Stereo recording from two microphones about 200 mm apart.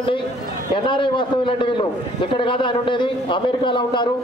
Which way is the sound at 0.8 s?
25° left (ahead or behind).